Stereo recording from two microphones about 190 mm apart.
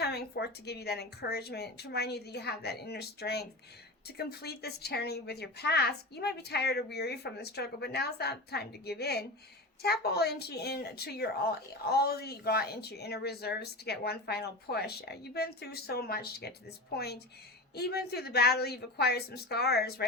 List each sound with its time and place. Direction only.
0.0 s a woman's voice: 60° left (ahead or behind)